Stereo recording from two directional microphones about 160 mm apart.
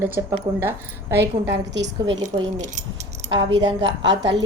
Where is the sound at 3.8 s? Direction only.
90° right.